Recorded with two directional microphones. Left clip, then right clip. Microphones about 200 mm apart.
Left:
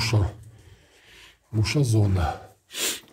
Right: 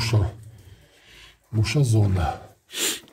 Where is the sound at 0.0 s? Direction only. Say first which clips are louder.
Even; 10° left (ahead or behind).